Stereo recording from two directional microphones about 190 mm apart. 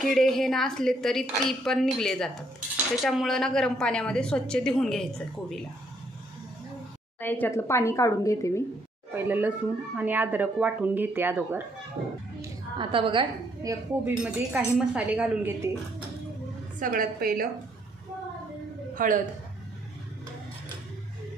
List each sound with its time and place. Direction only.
0.0 s a woman's voice: centre (ahead or behind)
7.2 s a woman's voice: 10° left (ahead or behind)
9.1 s speech: 10° right (ahead or behind)
12.4 s a woman's voice: 25° right (ahead or behind)
14.2 s speech: 5° right (ahead or behind)
16.8 s a woman's voice: 45° right (ahead or behind)
18.9 s a woman's voice: 45° right (ahead or behind)